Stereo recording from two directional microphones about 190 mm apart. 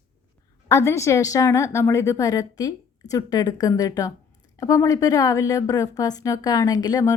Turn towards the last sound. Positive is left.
turn(degrees=20)  # may be behind; listen again after turning